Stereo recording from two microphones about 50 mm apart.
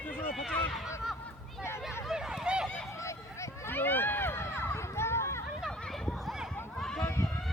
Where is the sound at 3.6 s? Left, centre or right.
Left.